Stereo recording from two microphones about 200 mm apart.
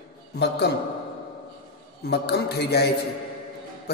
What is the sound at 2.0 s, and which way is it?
Speech, 55° left (ahead or behind).